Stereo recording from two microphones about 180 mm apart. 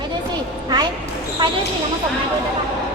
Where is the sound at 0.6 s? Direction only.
20° right (ahead or behind).